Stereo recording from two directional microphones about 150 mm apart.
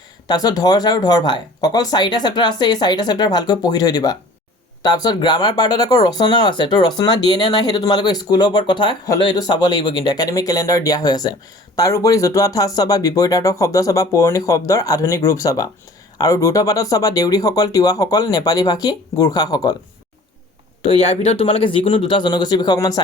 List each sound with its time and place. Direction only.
0.3 s speech: 25° left (ahead or behind)
20.8 s speech: 40° left (ahead or behind); by 23.0 s 25° left (ahead or behind)